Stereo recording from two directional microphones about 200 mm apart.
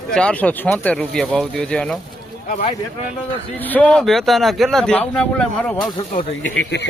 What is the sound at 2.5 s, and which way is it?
Speech, 35° left (ahead or behind).